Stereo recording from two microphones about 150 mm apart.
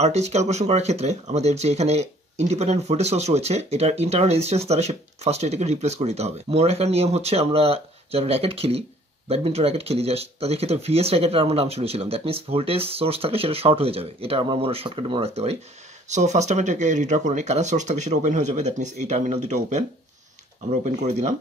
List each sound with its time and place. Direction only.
0.0 s speech: 45° right (ahead or behind)